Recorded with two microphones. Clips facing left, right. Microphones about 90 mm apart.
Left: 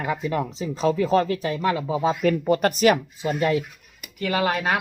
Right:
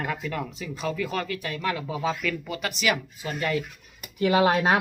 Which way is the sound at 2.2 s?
40° left (ahead or behind).